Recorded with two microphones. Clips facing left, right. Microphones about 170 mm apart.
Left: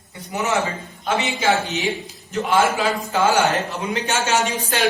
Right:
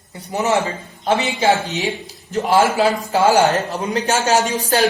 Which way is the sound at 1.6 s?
40° right (ahead or behind).